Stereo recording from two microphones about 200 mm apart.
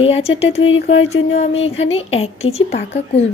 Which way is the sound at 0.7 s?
70° left (ahead or behind).